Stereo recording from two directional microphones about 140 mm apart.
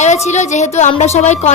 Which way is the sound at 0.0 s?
55° left (ahead or behind).